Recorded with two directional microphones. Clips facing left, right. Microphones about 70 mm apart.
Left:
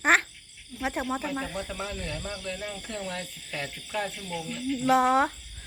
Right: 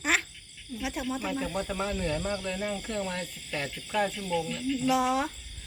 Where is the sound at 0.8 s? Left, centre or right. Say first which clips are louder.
Left 3 dB; left.